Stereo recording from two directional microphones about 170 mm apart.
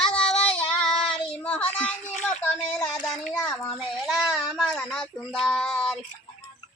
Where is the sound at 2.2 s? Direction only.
5° left (ahead or behind).